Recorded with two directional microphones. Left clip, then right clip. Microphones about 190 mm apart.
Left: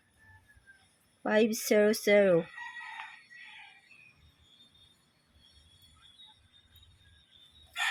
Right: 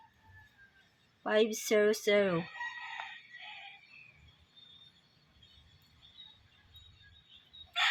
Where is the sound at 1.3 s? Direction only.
30° left (ahead or behind).